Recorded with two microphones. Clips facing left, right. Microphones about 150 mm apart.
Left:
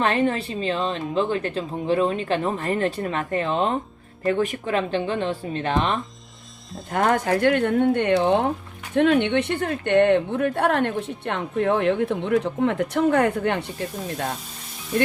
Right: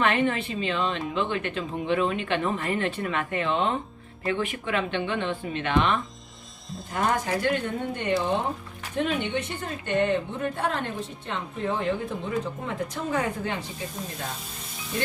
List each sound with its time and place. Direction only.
0.0 s speech: 35° left (ahead or behind)
6.9 s speech: 55° left (ahead or behind)